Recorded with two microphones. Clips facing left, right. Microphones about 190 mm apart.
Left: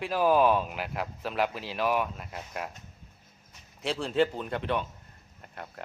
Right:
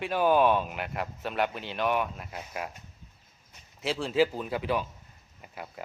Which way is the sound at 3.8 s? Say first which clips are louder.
Right 1 dB; centre (ahead or behind).